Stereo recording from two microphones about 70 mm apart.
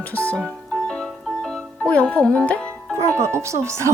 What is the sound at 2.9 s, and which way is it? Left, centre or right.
Speech, right.